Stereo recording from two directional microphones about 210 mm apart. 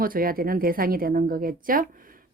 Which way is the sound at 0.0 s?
45° right (ahead or behind).